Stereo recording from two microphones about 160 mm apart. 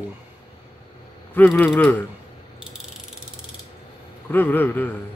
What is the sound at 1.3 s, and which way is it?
Speech, 10° left (ahead or behind).